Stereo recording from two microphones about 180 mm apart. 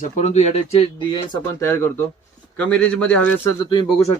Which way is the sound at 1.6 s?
10° left (ahead or behind).